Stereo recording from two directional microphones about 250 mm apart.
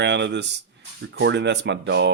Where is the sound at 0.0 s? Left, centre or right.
Right.